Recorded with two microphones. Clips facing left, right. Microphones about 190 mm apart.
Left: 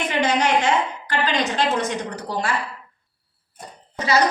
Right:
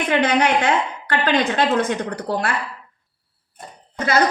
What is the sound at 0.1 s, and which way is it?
A woman's voice, 55° right (ahead or behind).